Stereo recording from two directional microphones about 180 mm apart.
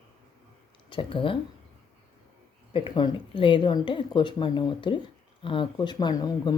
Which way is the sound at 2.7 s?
25° left (ahead or behind).